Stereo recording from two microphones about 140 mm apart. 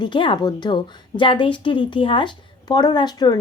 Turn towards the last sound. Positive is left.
turn(degrees=30)  # may be behind; listen again after turning